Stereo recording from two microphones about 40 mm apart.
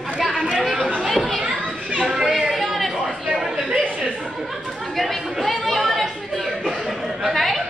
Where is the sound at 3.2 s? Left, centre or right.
Centre.